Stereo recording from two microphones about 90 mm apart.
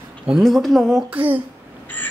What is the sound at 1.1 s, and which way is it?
Speech, 20° right (ahead or behind).